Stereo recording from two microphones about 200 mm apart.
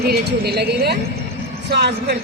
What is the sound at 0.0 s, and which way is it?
Speech, 50° right (ahead or behind).